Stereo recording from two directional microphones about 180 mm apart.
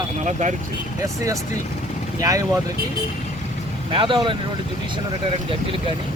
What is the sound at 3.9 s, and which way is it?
Speech, 25° right (ahead or behind).